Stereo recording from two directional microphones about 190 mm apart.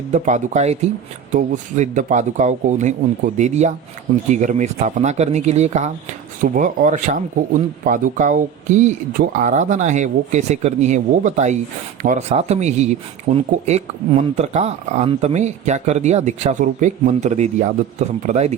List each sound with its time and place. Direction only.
0.1 s speech: 40° right (ahead or behind)